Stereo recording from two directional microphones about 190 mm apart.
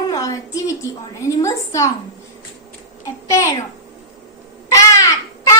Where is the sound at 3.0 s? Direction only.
15° left (ahead or behind).